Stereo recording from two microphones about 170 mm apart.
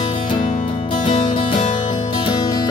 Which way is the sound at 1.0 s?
30° left (ahead or behind).